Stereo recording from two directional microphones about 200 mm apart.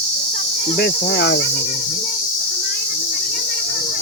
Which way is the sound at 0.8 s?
60° left (ahead or behind).